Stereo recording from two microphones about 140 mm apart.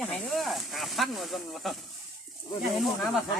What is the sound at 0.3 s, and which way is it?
Speech, centre (ahead or behind).